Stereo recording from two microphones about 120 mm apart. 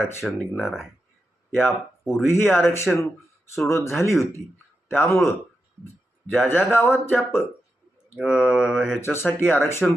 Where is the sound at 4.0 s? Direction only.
25° left (ahead or behind).